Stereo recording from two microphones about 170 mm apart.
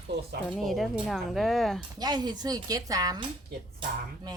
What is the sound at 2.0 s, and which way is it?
Speech, 25° right (ahead or behind).